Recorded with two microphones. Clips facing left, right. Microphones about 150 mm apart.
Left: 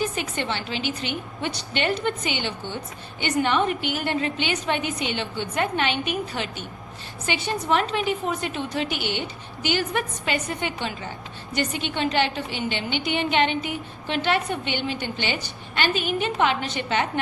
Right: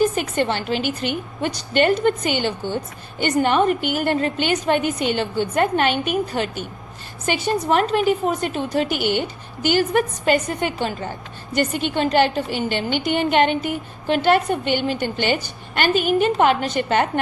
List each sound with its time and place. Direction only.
0.0 s a woman's voice: 45° right (ahead or behind)